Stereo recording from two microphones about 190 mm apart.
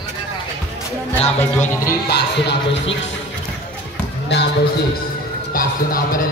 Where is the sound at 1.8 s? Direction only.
60° left (ahead or behind).